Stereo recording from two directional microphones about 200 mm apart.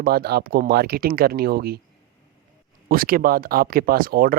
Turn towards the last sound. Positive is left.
turn(degrees=-45)  # may be behind; listen again after turning